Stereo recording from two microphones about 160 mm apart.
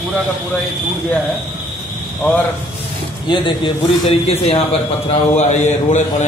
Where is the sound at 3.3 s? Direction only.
30° left (ahead or behind).